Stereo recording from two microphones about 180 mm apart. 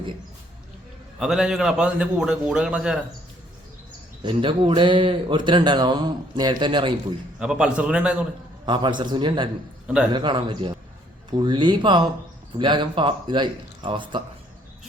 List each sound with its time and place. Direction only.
1.2 s a man's voice: 5° right (ahead or behind)
4.2 s speech: 25° right (ahead or behind)
7.3 s a man's voice: 5° right (ahead or behind)
8.6 s speech: 25° right (ahead or behind)
9.8 s a man's voice: 5° right (ahead or behind)
10.1 s speech: 25° right (ahead or behind)